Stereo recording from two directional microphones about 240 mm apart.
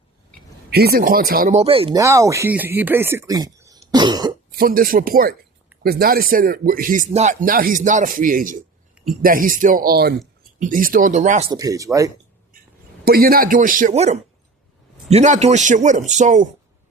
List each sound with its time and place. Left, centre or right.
0.7 s speech: right; by 4.4 s centre
4.5 s speech: right
11.5 s speech: centre
13.1 s a man's voice: right